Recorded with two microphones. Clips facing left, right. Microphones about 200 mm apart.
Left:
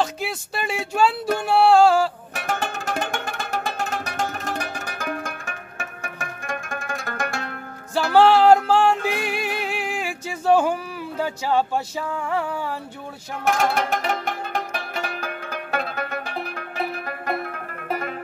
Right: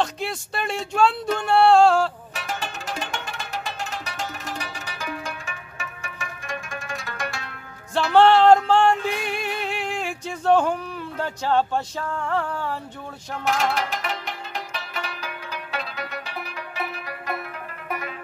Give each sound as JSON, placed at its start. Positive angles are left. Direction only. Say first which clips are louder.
{"t": 0.0, "sound": "speech", "louder": "left 1 dB", "side_deg": 5}
{"t": 2.3, "sound": "music", "louder": "left 4 dB", "side_deg": 50}
{"t": 8.1, "sound": "music", "louder": "even", "side_deg": 5}
{"t": 13.5, "sound": "music", "louder": "left 3 dB", "side_deg": 50}